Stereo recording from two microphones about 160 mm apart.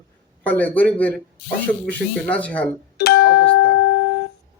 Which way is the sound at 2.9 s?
90° left.